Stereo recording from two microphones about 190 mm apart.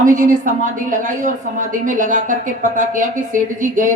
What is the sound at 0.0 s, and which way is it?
A woman's voice, 40° right (ahead or behind).